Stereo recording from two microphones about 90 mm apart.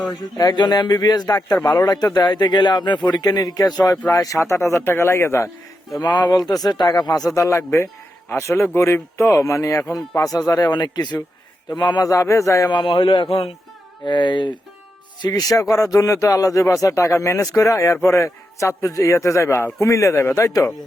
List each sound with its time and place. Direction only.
0.3 s a man's voice: 50° left (ahead or behind); by 5.5 s 30° left (ahead or behind)
6.0 s speech: 50° left (ahead or behind)
7.3 s a man's voice: 30° left (ahead or behind); by 12.0 s 55° left (ahead or behind)
12.0 s a man's voice: 35° left (ahead or behind)
12.7 s speech: 65° left (ahead or behind); by 13.5 s 90° left
14.0 s speech: 60° left (ahead or behind)
15.3 s a man's voice: 40° left (ahead or behind)